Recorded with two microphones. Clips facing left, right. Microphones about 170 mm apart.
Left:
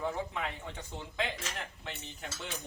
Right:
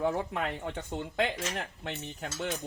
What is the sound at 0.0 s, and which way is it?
Speech, 65° right (ahead or behind).